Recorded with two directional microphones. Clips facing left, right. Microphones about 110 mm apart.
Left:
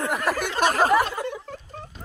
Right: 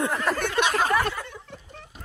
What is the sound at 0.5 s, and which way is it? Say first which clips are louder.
Speech: left 4 dB; 40° left (ahead or behind).